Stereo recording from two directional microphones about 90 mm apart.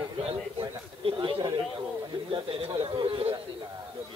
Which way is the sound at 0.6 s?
65° right (ahead or behind).